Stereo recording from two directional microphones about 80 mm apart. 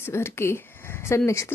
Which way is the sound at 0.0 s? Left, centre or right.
Left.